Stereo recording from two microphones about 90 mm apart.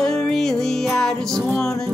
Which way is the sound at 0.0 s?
5° left (ahead or behind).